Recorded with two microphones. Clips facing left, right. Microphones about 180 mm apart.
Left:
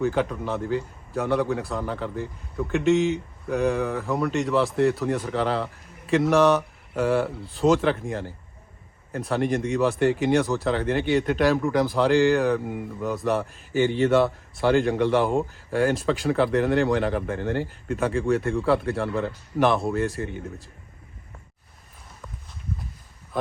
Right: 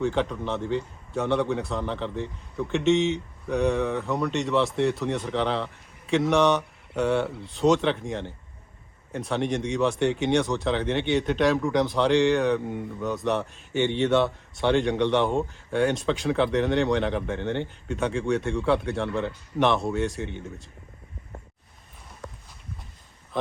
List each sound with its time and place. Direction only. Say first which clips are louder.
0.0 s speech: left 1 dB; 5° left (ahead or behind)